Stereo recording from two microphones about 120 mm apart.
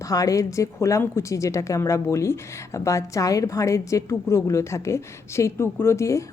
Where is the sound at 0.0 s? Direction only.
30° left (ahead or behind).